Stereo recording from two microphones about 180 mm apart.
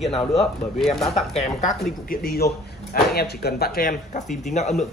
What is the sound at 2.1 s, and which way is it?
A man's voice, 55° left (ahead or behind).